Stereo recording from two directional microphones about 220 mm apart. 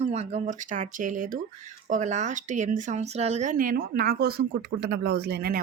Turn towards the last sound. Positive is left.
turn(degrees=-45)  # may be behind; listen again after turning